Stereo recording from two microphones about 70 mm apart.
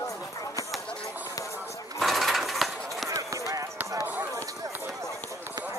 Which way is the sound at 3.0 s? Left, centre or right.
Right.